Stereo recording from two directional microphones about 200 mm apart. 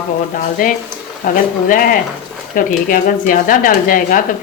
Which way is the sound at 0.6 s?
40° left (ahead or behind).